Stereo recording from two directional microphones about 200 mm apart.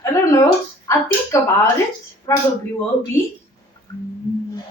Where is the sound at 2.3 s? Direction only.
15° left (ahead or behind).